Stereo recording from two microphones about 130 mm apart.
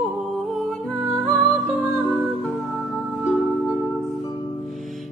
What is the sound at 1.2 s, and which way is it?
Music, centre (ahead or behind).